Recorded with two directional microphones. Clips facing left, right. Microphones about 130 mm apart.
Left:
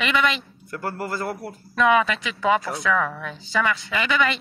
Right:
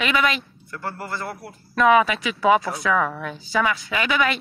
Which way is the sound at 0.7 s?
45° left (ahead or behind).